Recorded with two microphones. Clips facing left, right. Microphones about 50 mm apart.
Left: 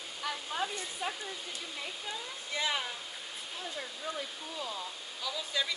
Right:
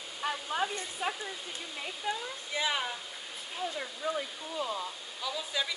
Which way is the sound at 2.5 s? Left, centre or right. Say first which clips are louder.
Right 2 dB; centre.